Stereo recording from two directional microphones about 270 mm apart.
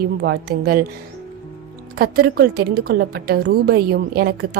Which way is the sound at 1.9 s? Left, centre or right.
Right.